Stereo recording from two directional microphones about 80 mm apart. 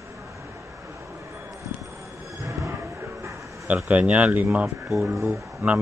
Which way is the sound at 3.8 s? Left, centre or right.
Centre.